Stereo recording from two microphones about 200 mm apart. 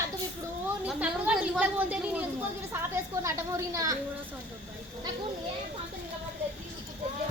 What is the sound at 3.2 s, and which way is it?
Speech, 15° right (ahead or behind).